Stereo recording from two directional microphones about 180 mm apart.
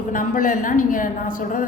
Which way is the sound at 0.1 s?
50° left (ahead or behind).